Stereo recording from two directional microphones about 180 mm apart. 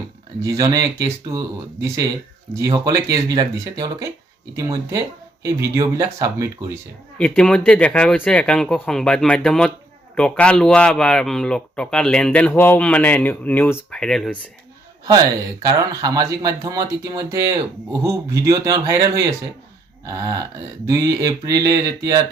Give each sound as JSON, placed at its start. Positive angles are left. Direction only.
{"t": 0.4, "sound": "speech", "side_deg": -20}
{"t": 7.2, "sound": "speech", "side_deg": 5}
{"t": 15.0, "sound": "speech", "side_deg": -20}